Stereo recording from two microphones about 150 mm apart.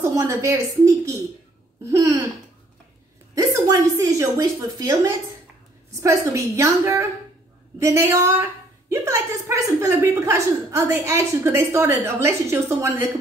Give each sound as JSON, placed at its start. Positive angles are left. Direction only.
{"t": 0.0, "sound": "a woman's voice", "side_deg": -20}
{"t": 3.3, "sound": "a woman's voice", "side_deg": -20}